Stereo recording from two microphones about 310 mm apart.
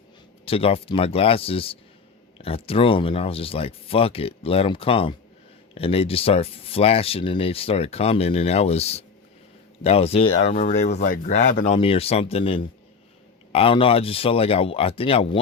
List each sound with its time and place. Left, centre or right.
0.4 s speech: centre